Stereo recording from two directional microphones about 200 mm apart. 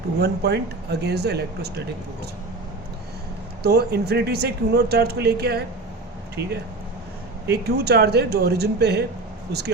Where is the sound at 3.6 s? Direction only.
55° right (ahead or behind).